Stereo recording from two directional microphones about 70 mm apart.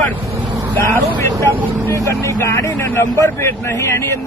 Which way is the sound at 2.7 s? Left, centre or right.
Left.